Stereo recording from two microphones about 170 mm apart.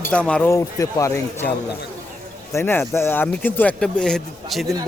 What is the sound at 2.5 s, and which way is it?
Speech, 15° left (ahead or behind).